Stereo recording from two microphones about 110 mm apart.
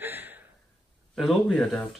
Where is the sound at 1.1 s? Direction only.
5° left (ahead or behind).